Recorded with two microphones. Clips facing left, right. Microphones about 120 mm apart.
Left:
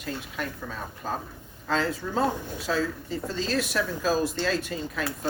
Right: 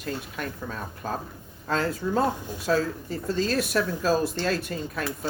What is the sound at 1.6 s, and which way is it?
Speech, 50° right (ahead or behind).